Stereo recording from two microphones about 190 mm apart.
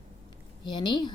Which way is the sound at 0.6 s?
25° left (ahead or behind).